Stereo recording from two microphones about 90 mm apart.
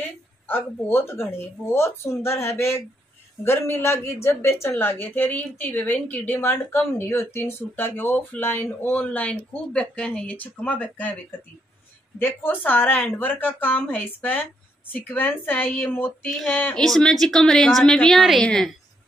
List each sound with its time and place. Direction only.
0.5 s a woman's voice: 25° left (ahead or behind)
12.2 s a woman's voice: 20° left (ahead or behind)
16.3 s a woman's voice: centre (ahead or behind)